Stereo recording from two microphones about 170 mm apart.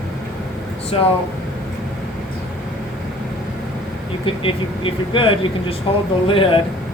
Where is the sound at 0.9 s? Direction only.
35° left (ahead or behind).